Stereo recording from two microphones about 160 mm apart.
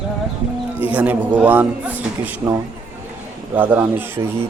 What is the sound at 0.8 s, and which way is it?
Speech, 10° right (ahead or behind).